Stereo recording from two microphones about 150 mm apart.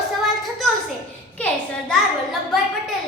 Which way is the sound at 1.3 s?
10° left (ahead or behind).